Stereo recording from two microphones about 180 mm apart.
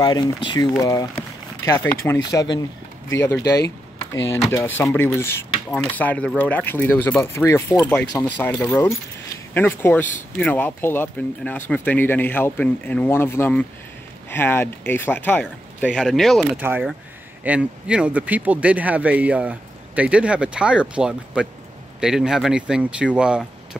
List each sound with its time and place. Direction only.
0.0 s speech: 25° left (ahead or behind)
1.6 s cutlery: 10° left (ahead or behind)
2.1 s speech: 25° left (ahead or behind)
3.2 s cutlery: 15° left (ahead or behind)
15.8 s speech: 5° left (ahead or behind)
16.5 s a man's voice: 10° right (ahead or behind)